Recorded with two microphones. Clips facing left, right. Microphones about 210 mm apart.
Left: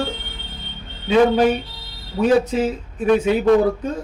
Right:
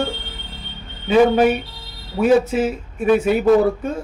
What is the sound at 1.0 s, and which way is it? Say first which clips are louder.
Speech: right 1 dB; 5° right (ahead or behind).